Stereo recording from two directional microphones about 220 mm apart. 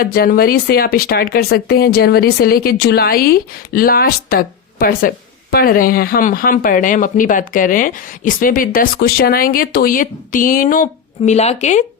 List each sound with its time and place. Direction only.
0.0 s speech: 40° left (ahead or behind)